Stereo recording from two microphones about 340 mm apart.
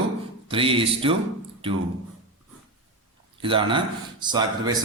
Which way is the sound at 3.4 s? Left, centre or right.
Centre.